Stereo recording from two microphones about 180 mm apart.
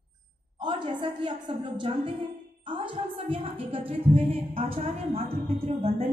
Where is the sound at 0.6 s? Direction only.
25° right (ahead or behind).